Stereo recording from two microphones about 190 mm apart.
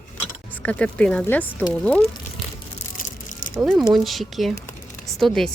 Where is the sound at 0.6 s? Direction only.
5° left (ahead or behind).